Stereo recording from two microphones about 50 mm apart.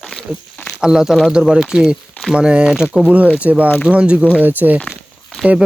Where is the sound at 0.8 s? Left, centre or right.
Centre.